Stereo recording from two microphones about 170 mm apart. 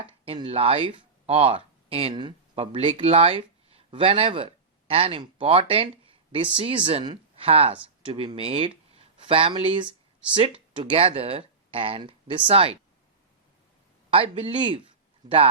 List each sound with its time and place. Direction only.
0.3 s speech: 30° right (ahead or behind)
14.1 s speech: 35° right (ahead or behind)